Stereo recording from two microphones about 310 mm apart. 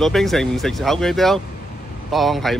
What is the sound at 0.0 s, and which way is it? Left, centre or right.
Speech, centre.